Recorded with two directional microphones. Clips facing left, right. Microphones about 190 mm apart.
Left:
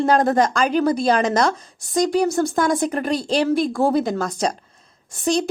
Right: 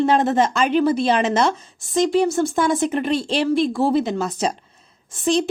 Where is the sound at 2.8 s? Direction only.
40° left (ahead or behind).